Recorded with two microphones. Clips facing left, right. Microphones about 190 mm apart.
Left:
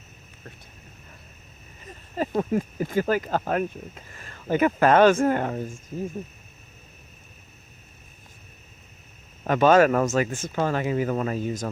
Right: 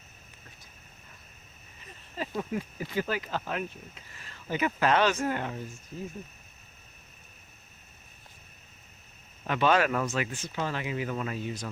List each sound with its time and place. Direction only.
2.1 s speech: 45° left (ahead or behind)
9.4 s speech: 45° left (ahead or behind)